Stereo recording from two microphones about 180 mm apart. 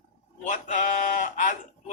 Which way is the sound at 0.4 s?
45° left (ahead or behind).